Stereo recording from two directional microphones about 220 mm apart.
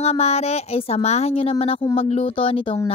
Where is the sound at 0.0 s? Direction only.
30° left (ahead or behind).